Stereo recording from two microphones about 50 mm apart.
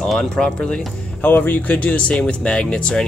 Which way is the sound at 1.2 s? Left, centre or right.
Left.